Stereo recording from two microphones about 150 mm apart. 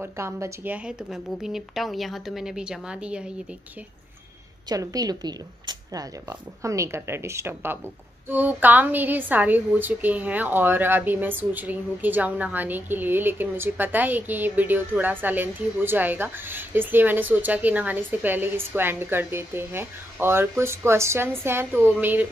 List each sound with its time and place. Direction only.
0.0 s a woman's voice: 15° right (ahead or behind)
0.8 s a woman's voice: 5° right (ahead or behind)
4.6 s a woman's voice: 25° right (ahead or behind)